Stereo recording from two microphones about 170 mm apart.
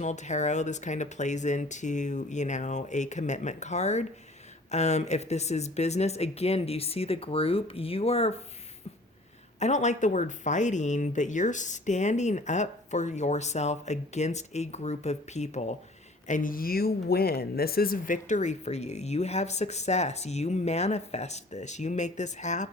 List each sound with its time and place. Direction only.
0.0 s speech: 45° left (ahead or behind)
9.6 s speech: 40° left (ahead or behind)